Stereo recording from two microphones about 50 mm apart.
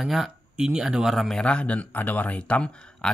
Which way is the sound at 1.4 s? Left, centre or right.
Left.